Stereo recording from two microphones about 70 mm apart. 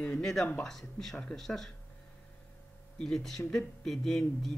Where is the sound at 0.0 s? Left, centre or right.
Centre.